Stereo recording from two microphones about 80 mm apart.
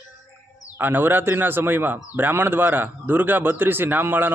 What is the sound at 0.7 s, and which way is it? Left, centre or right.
Speech, right.